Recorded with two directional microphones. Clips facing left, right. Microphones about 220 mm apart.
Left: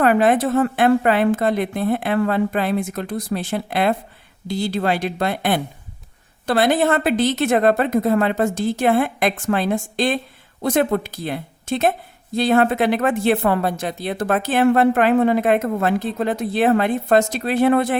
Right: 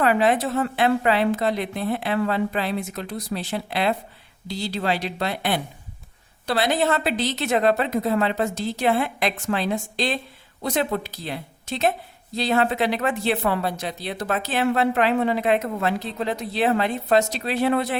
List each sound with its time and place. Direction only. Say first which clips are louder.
0.0 s a woman's voice: left 4 dB; 50° left (ahead or behind)